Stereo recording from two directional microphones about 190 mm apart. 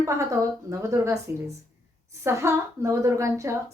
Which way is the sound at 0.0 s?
15° right (ahead or behind).